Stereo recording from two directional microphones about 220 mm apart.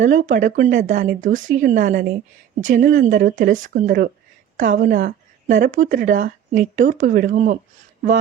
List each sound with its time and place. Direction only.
0.0 s a woman's voice: 35° right (ahead or behind)